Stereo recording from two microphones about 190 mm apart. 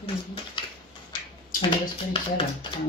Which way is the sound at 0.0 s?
30° left (ahead or behind).